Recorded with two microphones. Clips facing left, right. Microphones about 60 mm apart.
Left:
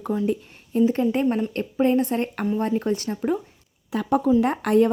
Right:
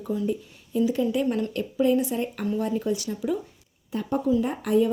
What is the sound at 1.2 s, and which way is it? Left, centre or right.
Speech, left.